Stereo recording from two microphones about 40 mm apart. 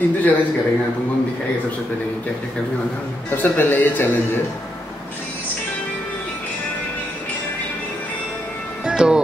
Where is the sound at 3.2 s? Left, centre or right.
Left.